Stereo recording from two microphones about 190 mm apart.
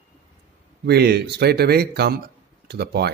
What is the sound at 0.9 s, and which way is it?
Speech, 60° right (ahead or behind).